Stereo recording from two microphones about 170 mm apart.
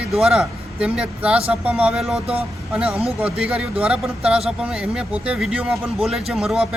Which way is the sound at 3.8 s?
5° right (ahead or behind).